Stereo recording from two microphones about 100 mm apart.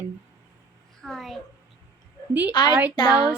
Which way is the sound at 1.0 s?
5° left (ahead or behind).